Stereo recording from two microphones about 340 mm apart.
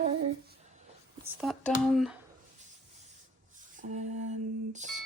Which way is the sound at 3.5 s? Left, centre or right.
Right.